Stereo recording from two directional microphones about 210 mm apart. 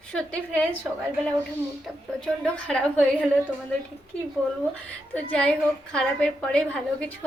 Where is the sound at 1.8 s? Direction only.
5° left (ahead or behind).